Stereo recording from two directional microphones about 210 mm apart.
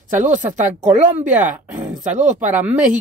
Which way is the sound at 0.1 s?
35° right (ahead or behind).